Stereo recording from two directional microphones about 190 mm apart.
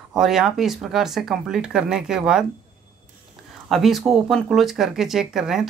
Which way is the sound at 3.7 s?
Centre (ahead or behind).